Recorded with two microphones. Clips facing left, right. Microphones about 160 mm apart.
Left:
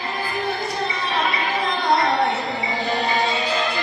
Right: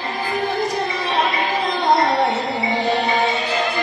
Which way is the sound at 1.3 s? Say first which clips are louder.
Right 2 dB; 40° right (ahead or behind).